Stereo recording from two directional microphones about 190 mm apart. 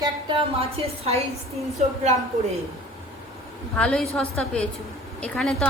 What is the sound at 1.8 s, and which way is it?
Speech, 40° right (ahead or behind).